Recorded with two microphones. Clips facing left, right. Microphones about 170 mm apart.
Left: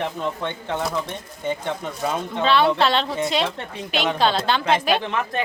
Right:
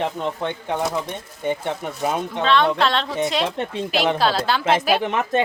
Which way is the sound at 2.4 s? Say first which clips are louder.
Left 1 dB; 5° left (ahead or behind).